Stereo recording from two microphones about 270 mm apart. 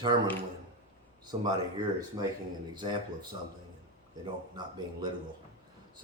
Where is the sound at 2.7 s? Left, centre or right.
Centre.